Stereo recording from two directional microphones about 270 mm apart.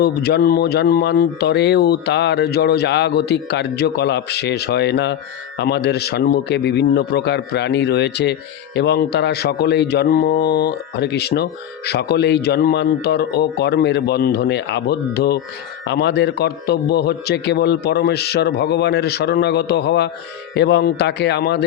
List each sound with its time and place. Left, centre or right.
0.0 s a man's voice: left